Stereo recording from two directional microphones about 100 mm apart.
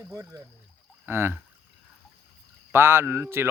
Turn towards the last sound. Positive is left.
turn(degrees=-25)  # may be behind; listen again after turning